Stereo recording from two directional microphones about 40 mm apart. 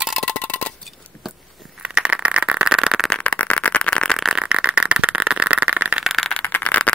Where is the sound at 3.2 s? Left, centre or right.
Left.